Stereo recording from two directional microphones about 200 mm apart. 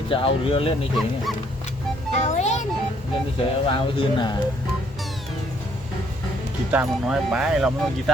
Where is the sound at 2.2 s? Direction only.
35° left (ahead or behind).